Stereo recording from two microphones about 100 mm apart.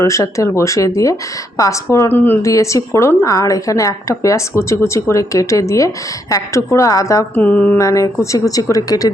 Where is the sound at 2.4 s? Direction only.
30° left (ahead or behind).